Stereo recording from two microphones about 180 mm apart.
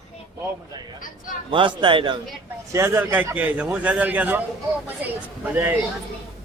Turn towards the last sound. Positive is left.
turn(degrees=-10)  # may be behind; listen again after turning